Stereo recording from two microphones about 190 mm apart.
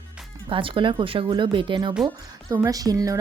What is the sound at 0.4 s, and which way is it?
Speech, 25° right (ahead or behind).